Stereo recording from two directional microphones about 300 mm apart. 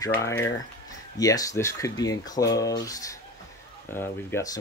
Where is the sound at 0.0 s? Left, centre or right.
Centre.